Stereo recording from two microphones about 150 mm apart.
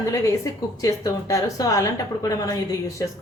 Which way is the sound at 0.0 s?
20° left (ahead or behind).